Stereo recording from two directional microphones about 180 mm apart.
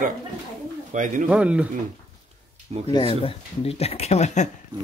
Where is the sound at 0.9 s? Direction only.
45° right (ahead or behind).